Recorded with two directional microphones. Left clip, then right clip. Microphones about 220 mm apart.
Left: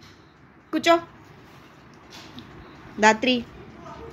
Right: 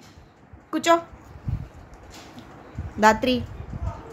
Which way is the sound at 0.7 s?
15° right (ahead or behind).